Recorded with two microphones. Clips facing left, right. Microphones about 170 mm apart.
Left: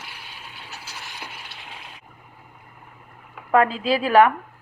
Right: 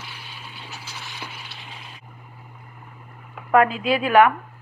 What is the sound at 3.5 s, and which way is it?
Speech, 30° left (ahead or behind).